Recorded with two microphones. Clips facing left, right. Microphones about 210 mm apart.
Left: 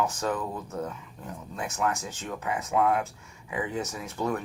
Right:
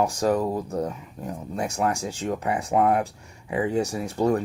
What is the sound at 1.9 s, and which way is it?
Speech, 10° right (ahead or behind).